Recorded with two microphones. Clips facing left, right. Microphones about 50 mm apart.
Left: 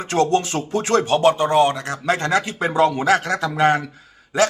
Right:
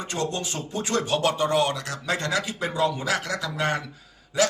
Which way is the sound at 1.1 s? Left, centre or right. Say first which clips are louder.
Left 6 dB; left.